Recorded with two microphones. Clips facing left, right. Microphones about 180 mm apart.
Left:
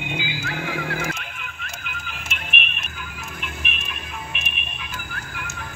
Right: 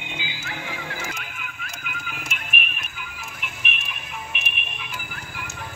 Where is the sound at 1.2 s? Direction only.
5° right (ahead or behind).